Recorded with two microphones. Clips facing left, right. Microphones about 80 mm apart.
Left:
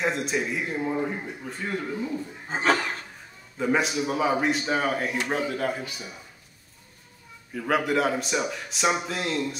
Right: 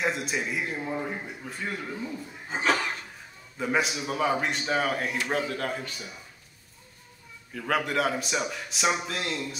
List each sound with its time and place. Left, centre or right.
0.0 s a man's voice: centre
2.5 s a sound: left
3.5 s a man's voice: centre
7.5 s a man's voice: centre